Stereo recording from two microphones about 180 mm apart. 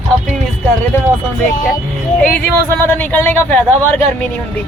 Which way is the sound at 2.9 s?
10° left (ahead or behind).